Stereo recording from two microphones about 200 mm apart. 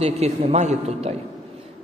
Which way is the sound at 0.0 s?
35° right (ahead or behind).